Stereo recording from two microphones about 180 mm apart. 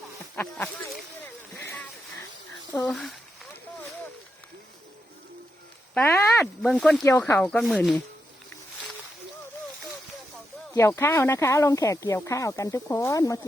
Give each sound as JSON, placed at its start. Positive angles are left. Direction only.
{"t": 0.3, "sound": "speech", "side_deg": 10}
{"t": 1.6, "sound": "a sound", "side_deg": 10}
{"t": 2.7, "sound": "speech", "side_deg": 10}
{"t": 5.9, "sound": "speech", "side_deg": 10}
{"t": 7.0, "sound": "speech", "side_deg": 15}
{"t": 10.8, "sound": "speech", "side_deg": 15}